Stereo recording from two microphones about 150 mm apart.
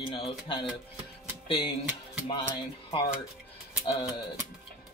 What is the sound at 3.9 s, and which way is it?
Speech, 30° left (ahead or behind).